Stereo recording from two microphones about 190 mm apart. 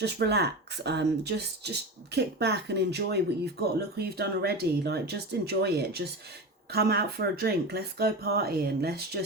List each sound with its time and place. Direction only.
0.0 s speech: 60° right (ahead or behind)